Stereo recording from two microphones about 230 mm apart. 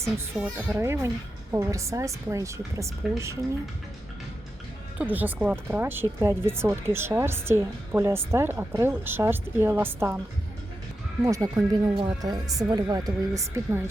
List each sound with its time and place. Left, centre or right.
0.5 s speech: centre
4.9 s speech: centre
11.2 s speech: centre